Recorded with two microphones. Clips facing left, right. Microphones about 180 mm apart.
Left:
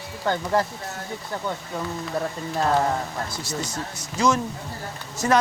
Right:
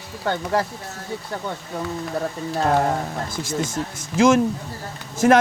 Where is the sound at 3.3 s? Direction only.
50° right (ahead or behind).